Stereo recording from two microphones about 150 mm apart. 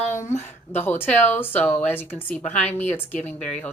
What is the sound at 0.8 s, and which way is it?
Speech, 15° left (ahead or behind).